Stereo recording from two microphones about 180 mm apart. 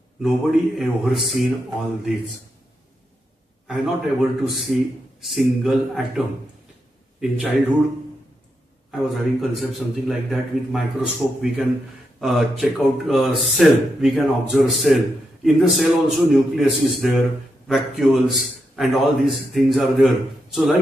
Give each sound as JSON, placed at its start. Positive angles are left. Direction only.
{"t": 0.2, "sound": "a man's voice", "side_deg": 0}
{"t": 3.6, "sound": "a man's voice", "side_deg": 0}
{"t": 8.9, "sound": "a man's voice", "side_deg": 0}